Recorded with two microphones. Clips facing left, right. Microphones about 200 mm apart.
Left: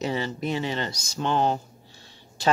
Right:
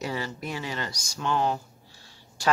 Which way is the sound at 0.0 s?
25° left (ahead or behind).